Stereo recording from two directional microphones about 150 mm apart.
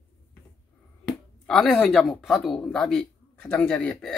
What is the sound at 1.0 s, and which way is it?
A woman's voice, 5° left (ahead or behind).